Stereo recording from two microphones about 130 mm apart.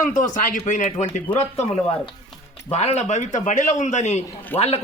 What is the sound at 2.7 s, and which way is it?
A man's voice, 55° left (ahead or behind).